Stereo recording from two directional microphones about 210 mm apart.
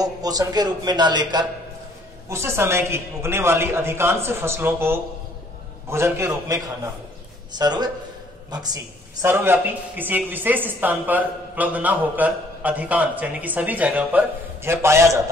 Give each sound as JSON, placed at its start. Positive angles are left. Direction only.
{"t": 0.0, "sound": "a man's voice", "side_deg": -15}